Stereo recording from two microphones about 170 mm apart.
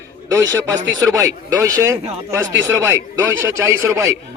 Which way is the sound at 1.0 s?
20° right (ahead or behind).